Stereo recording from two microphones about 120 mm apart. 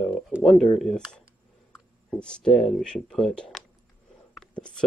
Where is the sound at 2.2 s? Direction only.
5° left (ahead or behind).